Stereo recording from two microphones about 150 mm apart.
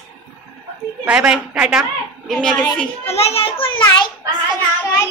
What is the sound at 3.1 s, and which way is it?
A child's voice, 45° left (ahead or behind).